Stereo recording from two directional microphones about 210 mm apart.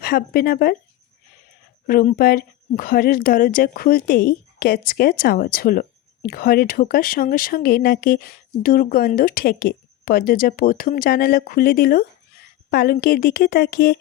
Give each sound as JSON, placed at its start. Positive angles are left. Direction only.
{"t": 0.0, "sound": "speech", "side_deg": 45}
{"t": 1.9, "sound": "speech", "side_deg": 45}